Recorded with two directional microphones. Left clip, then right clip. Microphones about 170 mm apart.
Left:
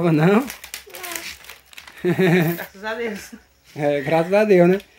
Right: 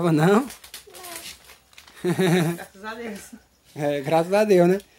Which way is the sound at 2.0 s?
15° right (ahead or behind).